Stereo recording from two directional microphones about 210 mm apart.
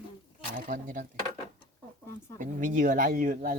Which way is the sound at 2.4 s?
40° right (ahead or behind).